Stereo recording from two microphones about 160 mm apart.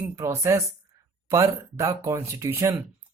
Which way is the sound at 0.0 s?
15° right (ahead or behind).